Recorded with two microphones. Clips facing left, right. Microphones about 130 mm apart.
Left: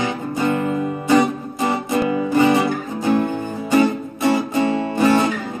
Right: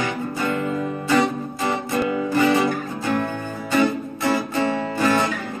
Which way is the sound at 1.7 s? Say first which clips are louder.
Left 3 dB; 20° left (ahead or behind).